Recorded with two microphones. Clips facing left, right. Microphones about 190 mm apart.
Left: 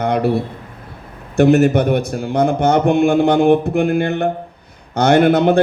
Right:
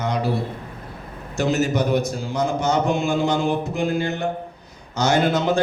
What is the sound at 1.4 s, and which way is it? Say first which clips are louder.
A man's voice: left 9 dB; 60° left (ahead or behind).